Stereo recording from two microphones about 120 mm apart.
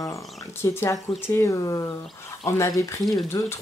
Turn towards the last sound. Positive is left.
turn(degrees=25)  # may be behind; listen again after turning